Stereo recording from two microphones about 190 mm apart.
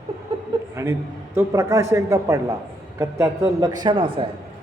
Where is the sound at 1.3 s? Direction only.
15° right (ahead or behind).